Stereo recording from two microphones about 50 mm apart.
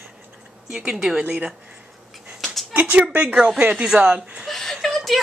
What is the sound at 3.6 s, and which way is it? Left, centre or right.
Speech, right.